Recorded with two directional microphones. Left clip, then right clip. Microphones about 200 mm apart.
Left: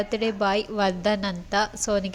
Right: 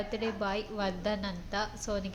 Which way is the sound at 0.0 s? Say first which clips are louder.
Left 9 dB; 45° left (ahead or behind).